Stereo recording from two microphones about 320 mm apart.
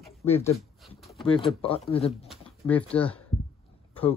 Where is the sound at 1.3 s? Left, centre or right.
Centre.